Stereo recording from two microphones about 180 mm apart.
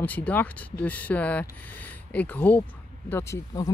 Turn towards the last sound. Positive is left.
turn(degrees=15)  # may be behind; listen again after turning